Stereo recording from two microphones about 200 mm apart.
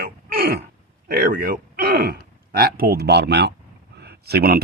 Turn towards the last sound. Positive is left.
turn(degrees=-50)  # may be behind; listen again after turning